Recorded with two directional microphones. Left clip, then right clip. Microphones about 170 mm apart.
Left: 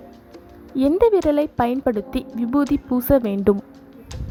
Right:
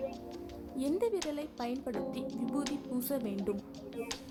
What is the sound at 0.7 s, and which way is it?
A woman's voice, 45° left (ahead or behind).